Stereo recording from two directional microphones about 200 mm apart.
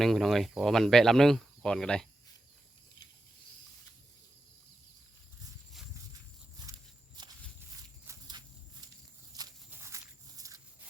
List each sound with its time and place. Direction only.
0.0 s speech: centre (ahead or behind)
7.2 s walk: 20° right (ahead or behind)
9.6 s a sound: 10° right (ahead or behind)